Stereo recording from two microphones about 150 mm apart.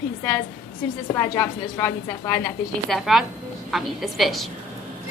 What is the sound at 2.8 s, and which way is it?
Speech, centre (ahead or behind).